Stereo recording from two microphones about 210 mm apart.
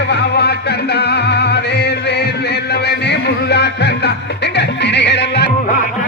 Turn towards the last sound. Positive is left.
turn(degrees=55)  # may be behind; listen again after turning